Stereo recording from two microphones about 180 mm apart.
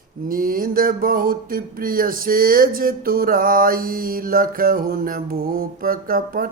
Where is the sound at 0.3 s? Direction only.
50° right (ahead or behind).